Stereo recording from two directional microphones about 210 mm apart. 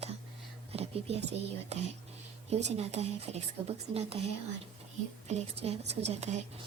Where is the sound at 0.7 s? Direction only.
30° right (ahead or behind).